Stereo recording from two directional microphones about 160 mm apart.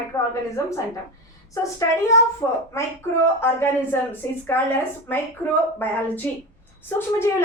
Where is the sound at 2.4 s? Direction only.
15° left (ahead or behind).